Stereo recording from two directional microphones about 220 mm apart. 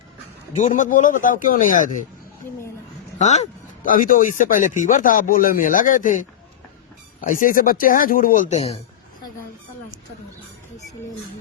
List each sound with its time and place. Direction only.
0.5 s speech: 35° left (ahead or behind)
3.2 s speech: 30° left (ahead or behind)